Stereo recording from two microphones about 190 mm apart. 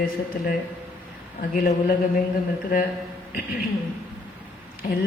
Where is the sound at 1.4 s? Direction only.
55° left (ahead or behind).